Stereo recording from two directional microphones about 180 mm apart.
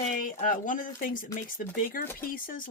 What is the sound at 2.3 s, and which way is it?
Speech, 50° left (ahead or behind).